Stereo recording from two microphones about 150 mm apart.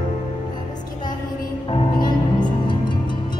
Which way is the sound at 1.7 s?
35° left (ahead or behind).